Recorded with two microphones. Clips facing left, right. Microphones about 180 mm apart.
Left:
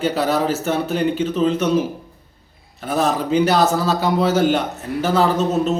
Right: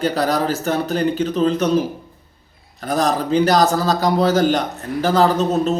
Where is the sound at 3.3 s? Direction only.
35° right (ahead or behind).